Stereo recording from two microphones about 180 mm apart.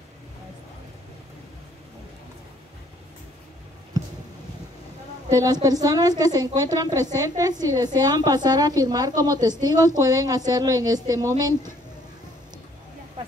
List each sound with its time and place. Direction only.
5.3 s a woman's voice: 20° right (ahead or behind)